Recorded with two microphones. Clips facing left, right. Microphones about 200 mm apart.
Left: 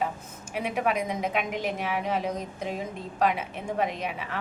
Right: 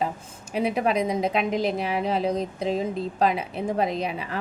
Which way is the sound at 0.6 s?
35° right (ahead or behind).